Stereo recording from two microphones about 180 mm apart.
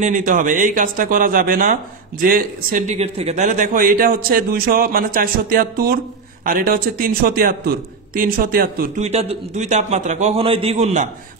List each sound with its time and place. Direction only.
0.0 s a man's voice: 50° right (ahead or behind)
9.0 s a man's voice: 35° right (ahead or behind)